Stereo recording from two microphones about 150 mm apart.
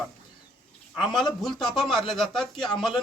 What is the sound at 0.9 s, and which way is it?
Speech, centre (ahead or behind).